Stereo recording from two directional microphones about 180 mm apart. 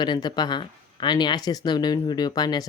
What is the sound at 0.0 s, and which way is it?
Speech, 25° left (ahead or behind).